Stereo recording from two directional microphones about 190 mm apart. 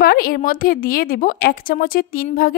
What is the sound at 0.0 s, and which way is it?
A woman's voice, 50° left (ahead or behind).